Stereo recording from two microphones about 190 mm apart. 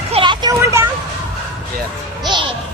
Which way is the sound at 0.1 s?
25° right (ahead or behind).